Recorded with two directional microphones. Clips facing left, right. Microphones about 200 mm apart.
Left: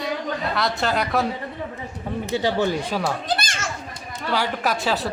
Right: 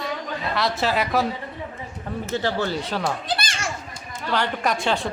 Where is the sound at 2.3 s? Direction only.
15° left (ahead or behind).